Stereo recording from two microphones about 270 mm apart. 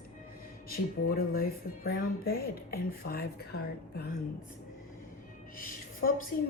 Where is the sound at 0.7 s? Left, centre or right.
Left.